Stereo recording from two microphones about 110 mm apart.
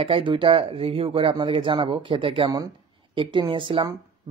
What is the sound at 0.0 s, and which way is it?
Speech, 55° right (ahead or behind).